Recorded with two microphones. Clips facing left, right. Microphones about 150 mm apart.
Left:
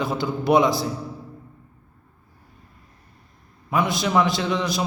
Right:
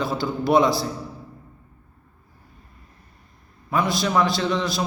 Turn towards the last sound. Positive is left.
turn(degrees=20)  # may be behind; listen again after turning